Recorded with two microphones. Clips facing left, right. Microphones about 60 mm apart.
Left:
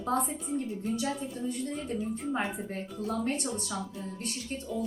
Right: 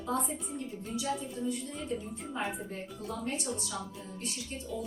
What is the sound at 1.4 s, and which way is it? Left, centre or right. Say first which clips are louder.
A woman's voice: left 2 dB; left.